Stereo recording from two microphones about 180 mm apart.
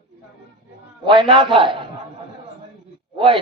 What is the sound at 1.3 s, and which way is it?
Speech, 30° right (ahead or behind).